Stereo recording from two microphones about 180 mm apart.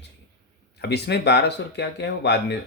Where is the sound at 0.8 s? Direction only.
70° left (ahead or behind).